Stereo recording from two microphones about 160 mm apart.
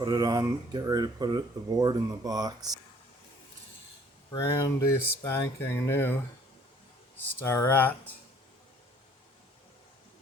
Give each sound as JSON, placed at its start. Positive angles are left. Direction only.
{"t": 0.0, "sound": "speech", "side_deg": -25}
{"t": 4.3, "sound": "speech", "side_deg": 20}
{"t": 7.2, "sound": "speech", "side_deg": 15}